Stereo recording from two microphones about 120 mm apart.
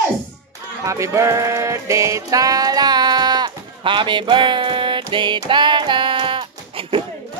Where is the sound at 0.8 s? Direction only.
25° right (ahead or behind); by 7.1 s 50° right (ahead or behind).